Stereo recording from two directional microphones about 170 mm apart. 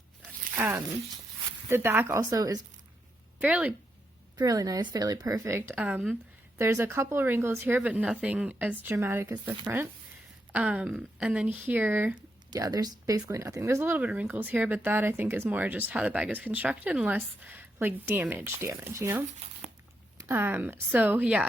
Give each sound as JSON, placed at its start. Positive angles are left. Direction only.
{"t": 0.5, "sound": "speech", "side_deg": -15}
{"t": 3.4, "sound": "speech", "side_deg": -10}
{"t": 4.4, "sound": "speech", "side_deg": -20}
{"t": 12.5, "sound": "speech", "side_deg": -20}